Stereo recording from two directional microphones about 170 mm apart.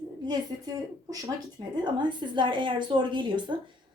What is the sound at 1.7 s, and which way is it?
A woman's voice, 25° right (ahead or behind).